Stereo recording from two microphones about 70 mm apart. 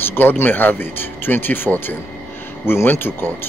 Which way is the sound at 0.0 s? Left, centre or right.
Left.